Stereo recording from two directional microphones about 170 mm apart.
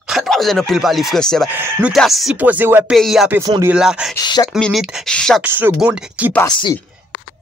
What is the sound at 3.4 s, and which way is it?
Speech, 20° right (ahead or behind).